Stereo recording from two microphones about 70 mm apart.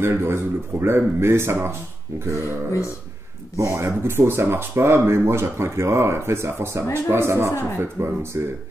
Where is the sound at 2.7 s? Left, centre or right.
Left.